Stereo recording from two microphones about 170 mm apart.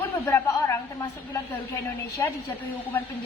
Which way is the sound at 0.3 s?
15° left (ahead or behind).